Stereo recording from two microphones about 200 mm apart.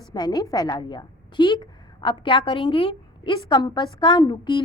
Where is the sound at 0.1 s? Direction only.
20° left (ahead or behind).